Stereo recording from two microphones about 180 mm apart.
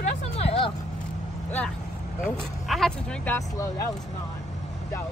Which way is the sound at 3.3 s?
15° left (ahead or behind).